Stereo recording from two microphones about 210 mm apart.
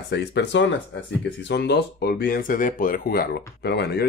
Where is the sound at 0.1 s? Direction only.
55° left (ahead or behind).